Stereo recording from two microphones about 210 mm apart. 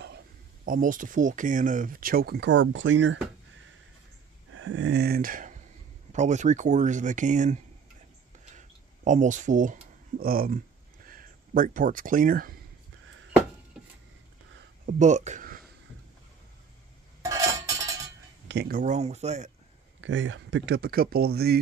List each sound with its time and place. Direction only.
0.7 s speech: 40° right (ahead or behind); by 3.2 s 60° right (ahead or behind)
4.5 s speech: 70° right (ahead or behind); by 7.6 s 35° right (ahead or behind)
8.5 s a sound: 35° right (ahead or behind)
11.1 s speech: 40° right (ahead or behind)
14.9 s speech: 35° right (ahead or behind)
17.2 s a sound: 15° right (ahead or behind)
18.5 s speech: 50° right (ahead or behind); by 19.5 s 35° right (ahead or behind)
20.0 s speech: 65° right (ahead or behind)